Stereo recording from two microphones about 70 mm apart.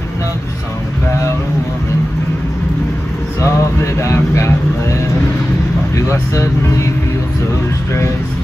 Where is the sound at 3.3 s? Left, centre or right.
Left.